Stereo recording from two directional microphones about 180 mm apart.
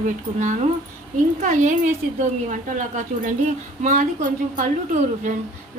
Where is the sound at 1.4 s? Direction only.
45° right (ahead or behind).